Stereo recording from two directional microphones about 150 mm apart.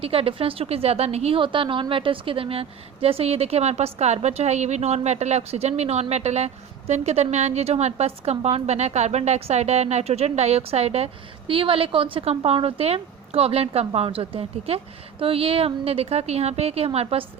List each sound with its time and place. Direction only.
0.0 s a woman's voice: 40° right (ahead or behind)